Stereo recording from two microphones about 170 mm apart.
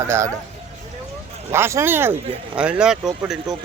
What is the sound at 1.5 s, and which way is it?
Speech, 15° right (ahead or behind).